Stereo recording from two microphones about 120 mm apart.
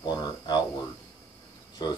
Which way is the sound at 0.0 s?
35° left (ahead or behind).